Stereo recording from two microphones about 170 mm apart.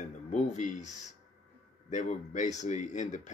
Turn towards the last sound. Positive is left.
turn(degrees=45)  # may be behind; listen again after turning